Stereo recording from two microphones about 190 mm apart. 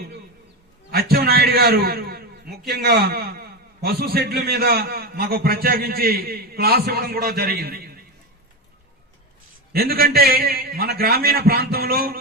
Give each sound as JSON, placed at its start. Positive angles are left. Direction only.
{"t": 0.9, "sound": "a sound", "side_deg": -55}
{"t": 2.6, "sound": "a man's voice", "side_deg": -60}
{"t": 9.7, "sound": "a man's voice", "side_deg": -55}